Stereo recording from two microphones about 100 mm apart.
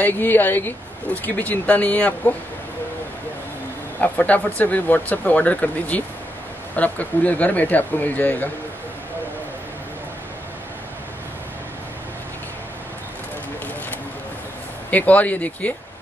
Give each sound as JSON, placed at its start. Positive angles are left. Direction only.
{"t": 0.0, "sound": "speech", "side_deg": 20}
{"t": 4.0, "sound": "speech", "side_deg": 15}
{"t": 14.9, "sound": "speech", "side_deg": 15}